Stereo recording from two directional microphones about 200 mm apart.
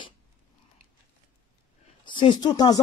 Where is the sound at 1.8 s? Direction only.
25° left (ahead or behind).